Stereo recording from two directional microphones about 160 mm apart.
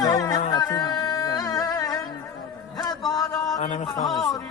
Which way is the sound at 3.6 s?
50° left (ahead or behind).